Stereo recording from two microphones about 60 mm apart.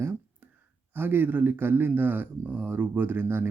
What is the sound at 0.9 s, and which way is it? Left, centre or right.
Speech, right.